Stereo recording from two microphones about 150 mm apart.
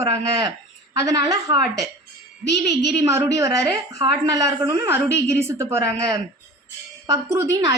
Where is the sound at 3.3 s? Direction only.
20° right (ahead or behind).